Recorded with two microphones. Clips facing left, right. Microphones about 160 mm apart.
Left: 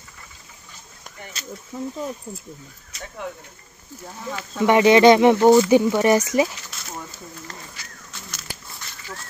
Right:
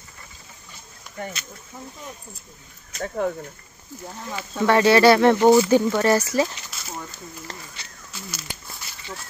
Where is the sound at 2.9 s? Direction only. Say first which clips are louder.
Right 8 dB; 40° right (ahead or behind).